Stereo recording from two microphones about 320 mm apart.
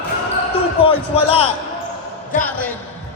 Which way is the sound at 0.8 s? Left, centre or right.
Centre.